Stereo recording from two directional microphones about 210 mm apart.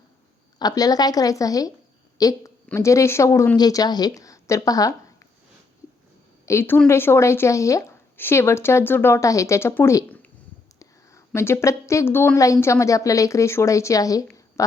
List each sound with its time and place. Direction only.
0.6 s a woman's voice: 20° left (ahead or behind)
6.4 s speech: 10° left (ahead or behind)
11.3 s speech: 10° left (ahead or behind)